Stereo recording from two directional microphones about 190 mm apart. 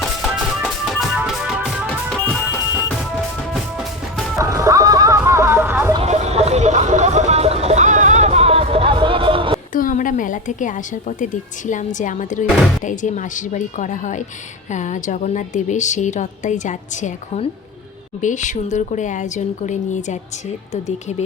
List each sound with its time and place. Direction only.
0.0 s music: centre (ahead or behind)
4.4 s music: 15° right (ahead or behind)
6.0 s music: 35° right (ahead or behind)
9.7 s speech: 45° left (ahead or behind)